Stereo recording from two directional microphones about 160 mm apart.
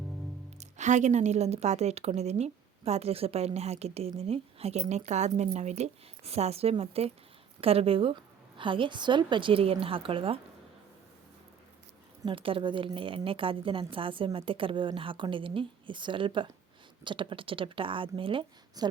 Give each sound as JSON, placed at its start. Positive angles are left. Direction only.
{"t": 0.6, "sound": "a woman's voice", "side_deg": -50}
{"t": 12.2, "sound": "a woman's voice", "side_deg": -35}